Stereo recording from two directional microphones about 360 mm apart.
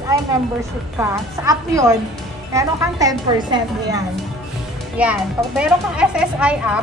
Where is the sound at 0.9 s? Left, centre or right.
Centre.